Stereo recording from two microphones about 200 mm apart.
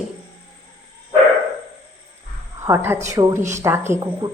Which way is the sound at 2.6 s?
10° right (ahead or behind).